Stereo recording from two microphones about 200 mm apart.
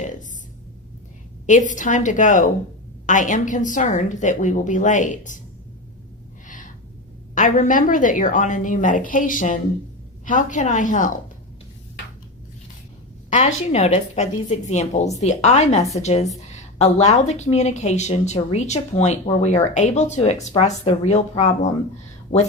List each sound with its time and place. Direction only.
0.0 s a sound: 40° left (ahead or behind)
1.5 s speech: 40° left (ahead or behind)
7.3 s speech: 40° left (ahead or behind)
13.3 s speech: 35° left (ahead or behind)
22.3 s speech: 25° left (ahead or behind)